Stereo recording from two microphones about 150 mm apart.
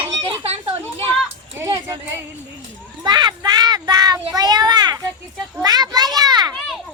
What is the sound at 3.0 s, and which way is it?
Child singing, 30° right (ahead or behind).